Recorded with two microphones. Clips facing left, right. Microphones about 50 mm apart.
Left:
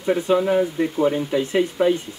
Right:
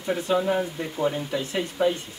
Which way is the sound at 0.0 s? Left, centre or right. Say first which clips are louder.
Left 5 dB; centre.